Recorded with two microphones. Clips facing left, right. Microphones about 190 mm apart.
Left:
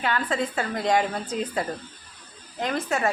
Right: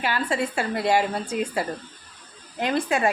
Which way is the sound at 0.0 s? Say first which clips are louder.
Right 1 dB; 10° right (ahead or behind).